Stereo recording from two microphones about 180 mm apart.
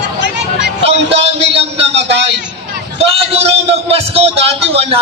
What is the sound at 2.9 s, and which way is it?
A man's voice, 30° right (ahead or behind).